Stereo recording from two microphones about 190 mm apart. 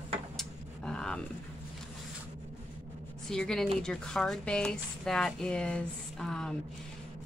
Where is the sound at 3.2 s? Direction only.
5° left (ahead or behind).